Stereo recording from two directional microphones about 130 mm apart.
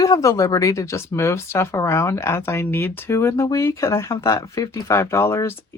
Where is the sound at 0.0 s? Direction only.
25° left (ahead or behind).